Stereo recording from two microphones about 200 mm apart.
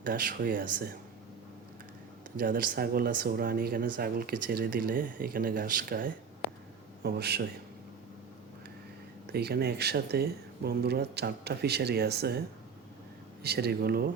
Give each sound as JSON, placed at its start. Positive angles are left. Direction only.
{"t": 0.0, "sound": "speech", "side_deg": -45}
{"t": 2.4, "sound": "speech", "side_deg": -45}
{"t": 7.0, "sound": "speech", "side_deg": -55}
{"t": 9.2, "sound": "speech", "side_deg": -55}
{"t": 13.4, "sound": "speech", "side_deg": -55}